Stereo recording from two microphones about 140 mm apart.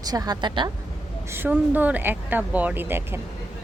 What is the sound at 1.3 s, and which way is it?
Speech, 15° right (ahead or behind).